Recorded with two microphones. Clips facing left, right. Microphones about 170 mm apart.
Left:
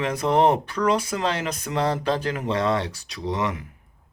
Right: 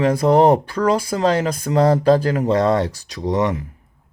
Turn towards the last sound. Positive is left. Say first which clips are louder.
# right 7 dB
turn(degrees=-40)  # may be behind; listen again after turning